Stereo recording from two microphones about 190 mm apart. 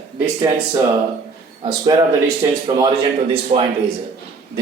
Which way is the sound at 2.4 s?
20° right (ahead or behind).